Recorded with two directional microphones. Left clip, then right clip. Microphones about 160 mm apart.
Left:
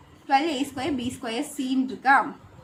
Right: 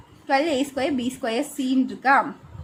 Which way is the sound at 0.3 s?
45° right (ahead or behind).